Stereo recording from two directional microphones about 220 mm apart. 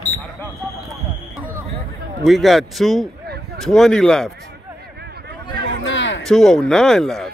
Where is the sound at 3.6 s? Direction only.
Centre (ahead or behind).